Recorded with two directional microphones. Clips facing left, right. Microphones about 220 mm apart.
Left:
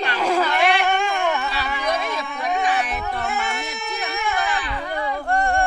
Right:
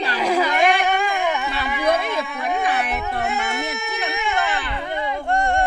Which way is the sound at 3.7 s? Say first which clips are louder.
Right 2 dB; 60° right (ahead or behind).